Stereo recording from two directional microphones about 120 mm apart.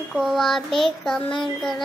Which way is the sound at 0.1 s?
Centre (ahead or behind).